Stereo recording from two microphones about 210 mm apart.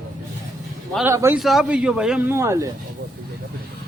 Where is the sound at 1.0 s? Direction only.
10° right (ahead or behind).